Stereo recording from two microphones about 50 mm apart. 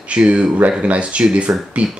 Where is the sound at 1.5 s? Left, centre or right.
Right.